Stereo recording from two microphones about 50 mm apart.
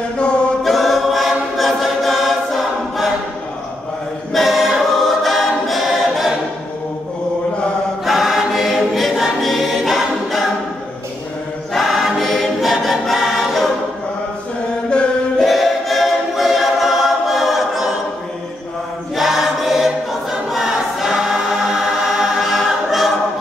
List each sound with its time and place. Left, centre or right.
0.7 s choir: centre
4.3 s choir: centre
8.0 s choir: centre
11.7 s choir: centre
14.9 s chant: centre
15.4 s choir: centre
19.1 s choir: centre